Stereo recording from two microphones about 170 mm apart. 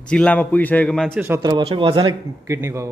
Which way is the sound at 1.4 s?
25° right (ahead or behind).